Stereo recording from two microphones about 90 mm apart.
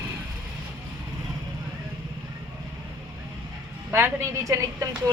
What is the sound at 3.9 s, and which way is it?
Speech, 30° right (ahead or behind).